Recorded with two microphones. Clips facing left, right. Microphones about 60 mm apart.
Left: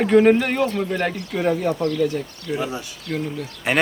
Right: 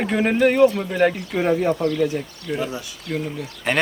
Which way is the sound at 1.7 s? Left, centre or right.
Right.